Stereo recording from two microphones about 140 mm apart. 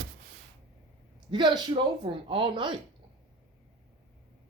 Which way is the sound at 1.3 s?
35° right (ahead or behind).